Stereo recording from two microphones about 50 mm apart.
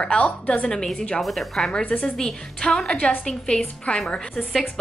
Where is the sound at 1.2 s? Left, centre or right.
Centre.